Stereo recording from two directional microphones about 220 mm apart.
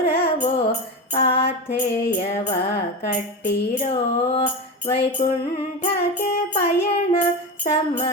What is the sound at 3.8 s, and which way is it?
Music, 25° left (ahead or behind).